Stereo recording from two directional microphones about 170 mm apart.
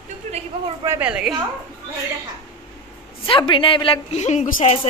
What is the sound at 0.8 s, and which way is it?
Speech, 10° right (ahead or behind).